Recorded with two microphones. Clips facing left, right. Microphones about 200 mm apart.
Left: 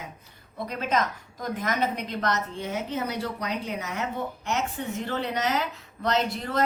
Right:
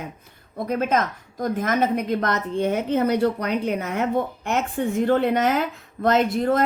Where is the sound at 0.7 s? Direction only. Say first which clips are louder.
Right 5 dB; 50° right (ahead or behind).